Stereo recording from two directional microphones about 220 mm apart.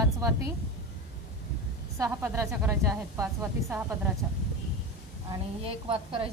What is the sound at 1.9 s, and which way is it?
A woman's voice, 10° right (ahead or behind).